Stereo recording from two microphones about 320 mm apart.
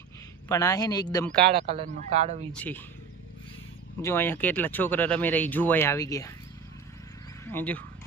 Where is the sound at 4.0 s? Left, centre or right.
Centre.